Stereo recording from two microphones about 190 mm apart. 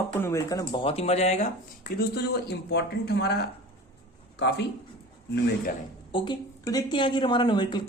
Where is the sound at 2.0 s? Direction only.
55° left (ahead or behind).